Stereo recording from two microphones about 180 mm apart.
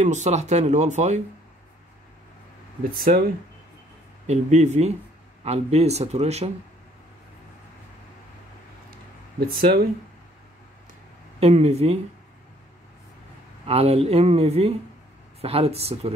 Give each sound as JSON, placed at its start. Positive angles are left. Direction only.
{"t": 0.0, "sound": "speech", "side_deg": -40}
{"t": 3.0, "sound": "speech", "side_deg": -55}
{"t": 4.3, "sound": "speech", "side_deg": -40}
{"t": 11.3, "sound": "speech", "side_deg": -35}
{"t": 13.7, "sound": "speech", "side_deg": -35}